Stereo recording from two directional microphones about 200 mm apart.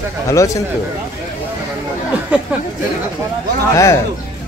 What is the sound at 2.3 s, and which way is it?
Speech, 5° right (ahead or behind).